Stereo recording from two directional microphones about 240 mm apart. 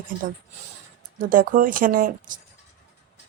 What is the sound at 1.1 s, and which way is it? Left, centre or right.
A woman's voice, right.